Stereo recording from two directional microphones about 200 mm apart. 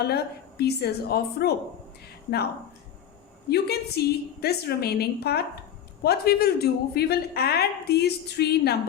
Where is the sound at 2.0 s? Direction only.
55° left (ahead or behind).